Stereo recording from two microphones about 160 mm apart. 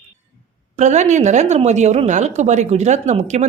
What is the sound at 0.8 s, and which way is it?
Speech, 45° right (ahead or behind).